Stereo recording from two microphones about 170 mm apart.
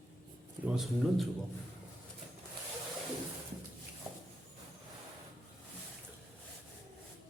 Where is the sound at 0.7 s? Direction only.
Centre (ahead or behind).